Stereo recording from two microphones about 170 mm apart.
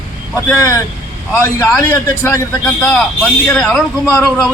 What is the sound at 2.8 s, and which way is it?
A man's voice, 5° left (ahead or behind).